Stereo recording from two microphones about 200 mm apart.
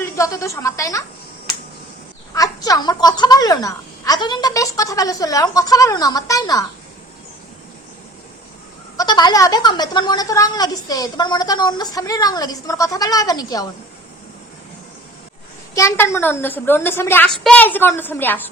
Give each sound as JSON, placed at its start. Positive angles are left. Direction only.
{"t": 0.0, "sound": "speech", "side_deg": 15}
{"t": 2.3, "sound": "speech", "side_deg": 15}
{"t": 9.0, "sound": "a woman's voice", "side_deg": 20}
{"t": 15.7, "sound": "speech", "side_deg": 15}